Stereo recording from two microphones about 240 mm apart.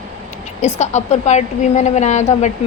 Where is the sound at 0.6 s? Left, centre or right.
Left.